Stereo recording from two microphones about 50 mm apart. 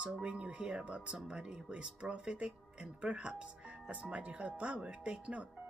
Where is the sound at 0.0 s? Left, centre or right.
Right.